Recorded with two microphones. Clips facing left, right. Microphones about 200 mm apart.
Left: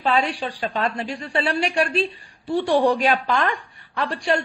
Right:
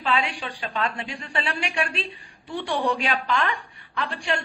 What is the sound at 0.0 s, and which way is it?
Speech, 40° left (ahead or behind).